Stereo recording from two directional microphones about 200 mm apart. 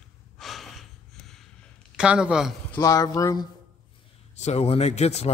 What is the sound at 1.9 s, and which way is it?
Speech, 5° right (ahead or behind).